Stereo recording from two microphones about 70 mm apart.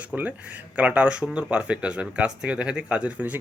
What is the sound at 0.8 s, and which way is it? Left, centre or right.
A man's voice, centre.